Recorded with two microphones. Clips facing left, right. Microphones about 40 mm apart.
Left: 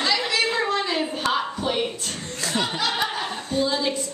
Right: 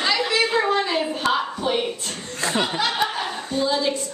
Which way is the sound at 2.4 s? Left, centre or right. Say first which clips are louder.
Right 2 dB; centre.